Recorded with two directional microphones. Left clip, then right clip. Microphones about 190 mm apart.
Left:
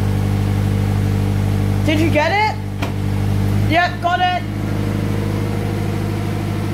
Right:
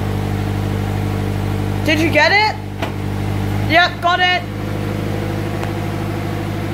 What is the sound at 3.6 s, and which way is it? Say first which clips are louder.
Speech: right 3 dB; 5° right (ahead or behind).